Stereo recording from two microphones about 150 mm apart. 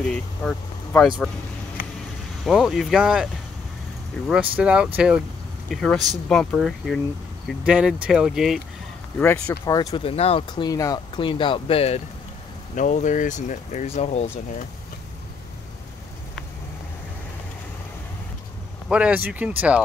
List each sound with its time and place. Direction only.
0.1 s speech: centre (ahead or behind)
2.4 s speech: centre (ahead or behind)
4.3 s speech: 10° right (ahead or behind)
5.7 s speech: 5° left (ahead or behind)
9.2 s speech: 15° left (ahead or behind)
9.8 s speech: 30° left (ahead or behind)
10.5 s speech: 25° left (ahead or behind)
11.1 s speech: 35° left (ahead or behind)
12.7 s speech: 55° left (ahead or behind)
18.9 s speech: 10° right (ahead or behind)